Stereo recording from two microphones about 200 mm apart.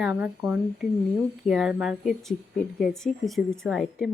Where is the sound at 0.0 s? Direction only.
5° right (ahead or behind).